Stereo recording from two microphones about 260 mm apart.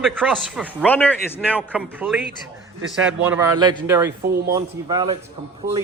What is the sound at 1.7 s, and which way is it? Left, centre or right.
A man's voice, centre.